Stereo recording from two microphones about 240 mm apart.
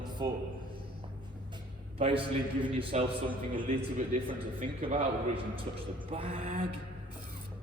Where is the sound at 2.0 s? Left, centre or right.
Right.